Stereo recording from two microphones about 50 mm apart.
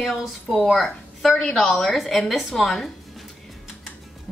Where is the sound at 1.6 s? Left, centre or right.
Centre.